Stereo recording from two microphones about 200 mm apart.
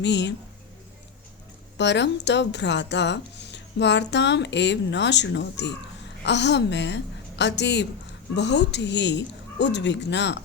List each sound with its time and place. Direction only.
0.0 s speech: 60° left (ahead or behind)
1.8 s speech: 60° left (ahead or behind)